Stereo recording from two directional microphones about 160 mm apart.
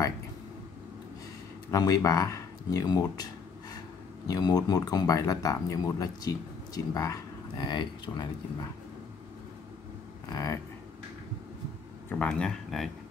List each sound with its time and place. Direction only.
1.7 s speech: 20° left (ahead or behind)
4.3 s speech: 25° left (ahead or behind)
10.3 s speech: 20° left (ahead or behind)
12.1 s speech: 5° left (ahead or behind)